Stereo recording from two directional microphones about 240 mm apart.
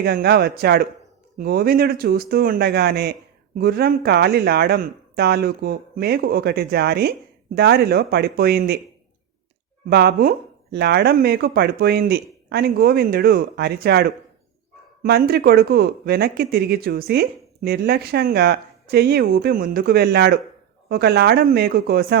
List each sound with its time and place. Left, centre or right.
0.0 s speech: right
9.9 s speech: right